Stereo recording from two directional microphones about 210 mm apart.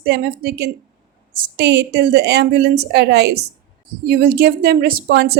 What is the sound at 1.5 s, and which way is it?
A woman's voice, 55° right (ahead or behind).